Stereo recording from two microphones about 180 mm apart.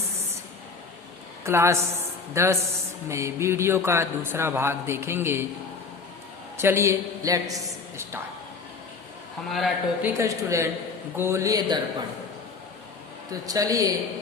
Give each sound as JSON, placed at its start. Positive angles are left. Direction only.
{"t": 1.5, "sound": "a man's voice", "side_deg": -15}
{"t": 6.6, "sound": "a woman's voice", "side_deg": -15}
{"t": 9.5, "sound": "speech", "side_deg": 0}
{"t": 10.2, "sound": "a man's voice", "side_deg": -15}
{"t": 13.4, "sound": "a man's voice", "side_deg": -20}